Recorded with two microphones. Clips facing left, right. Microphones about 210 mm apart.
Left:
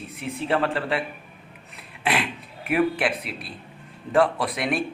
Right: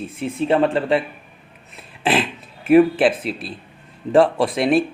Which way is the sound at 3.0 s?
25° right (ahead or behind).